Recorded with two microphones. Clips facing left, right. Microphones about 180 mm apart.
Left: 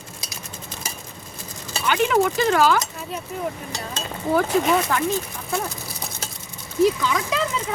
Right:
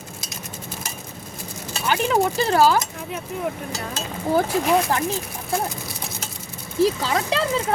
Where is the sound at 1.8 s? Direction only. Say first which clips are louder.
Left 1 dB; 30° right (ahead or behind).